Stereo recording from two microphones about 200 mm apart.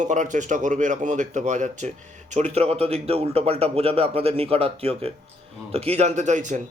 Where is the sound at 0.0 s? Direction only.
40° right (ahead or behind).